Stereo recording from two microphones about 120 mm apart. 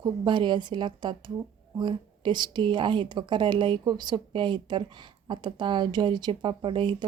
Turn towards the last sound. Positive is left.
turn(degrees=-40)  # may be behind; listen again after turning